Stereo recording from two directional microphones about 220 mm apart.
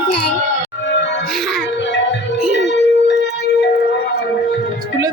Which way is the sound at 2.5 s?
55° left (ahead or behind).